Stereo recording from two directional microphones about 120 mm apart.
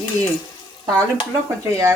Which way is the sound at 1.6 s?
25° right (ahead or behind).